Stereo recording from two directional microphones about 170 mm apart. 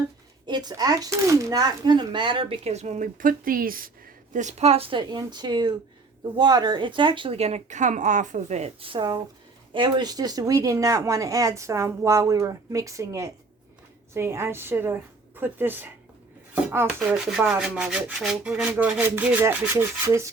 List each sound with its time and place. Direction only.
0.4 s speech: 25° right (ahead or behind)
14.1 s rub: 15° right (ahead or behind)